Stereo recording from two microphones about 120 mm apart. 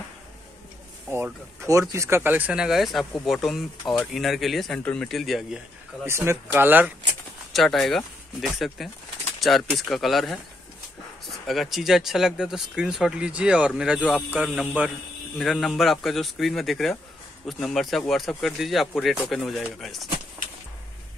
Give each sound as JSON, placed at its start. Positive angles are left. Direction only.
{"t": 1.1, "sound": "speech", "side_deg": -20}
{"t": 6.0, "sound": "speech", "side_deg": -20}
{"t": 7.5, "sound": "speech", "side_deg": 0}
{"t": 15.3, "sound": "speech", "side_deg": 0}